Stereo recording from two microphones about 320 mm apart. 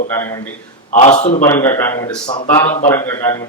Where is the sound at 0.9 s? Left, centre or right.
Centre.